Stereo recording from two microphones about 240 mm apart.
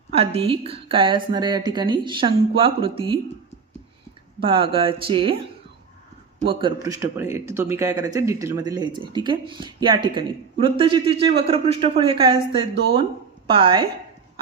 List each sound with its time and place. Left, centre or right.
0.1 s a man's voice: right
4.4 s a man's voice: right
6.4 s a man's voice: right